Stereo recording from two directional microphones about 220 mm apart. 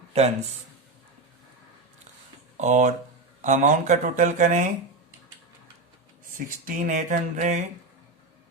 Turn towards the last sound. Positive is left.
turn(degrees=-35)  # may be behind; listen again after turning